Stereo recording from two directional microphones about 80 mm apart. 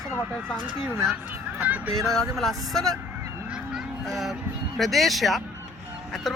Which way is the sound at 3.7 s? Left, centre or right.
Centre.